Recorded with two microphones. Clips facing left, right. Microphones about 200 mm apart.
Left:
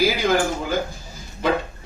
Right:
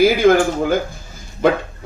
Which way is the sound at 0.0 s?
55° right (ahead or behind).